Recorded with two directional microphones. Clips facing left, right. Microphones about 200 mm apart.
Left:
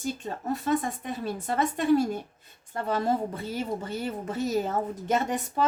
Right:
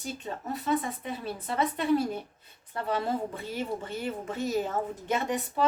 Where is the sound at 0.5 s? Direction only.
45° left (ahead or behind).